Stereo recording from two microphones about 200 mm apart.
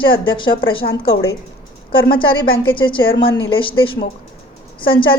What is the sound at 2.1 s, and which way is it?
A woman's voice, 25° left (ahead or behind).